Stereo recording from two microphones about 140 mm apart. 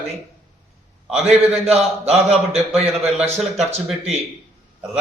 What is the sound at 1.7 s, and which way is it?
Speech, 45° right (ahead or behind).